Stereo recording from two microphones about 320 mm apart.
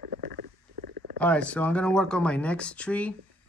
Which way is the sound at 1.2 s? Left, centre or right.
Centre.